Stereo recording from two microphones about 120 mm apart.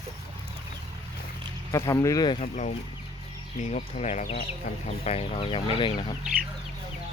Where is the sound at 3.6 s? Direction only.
65° left (ahead or behind).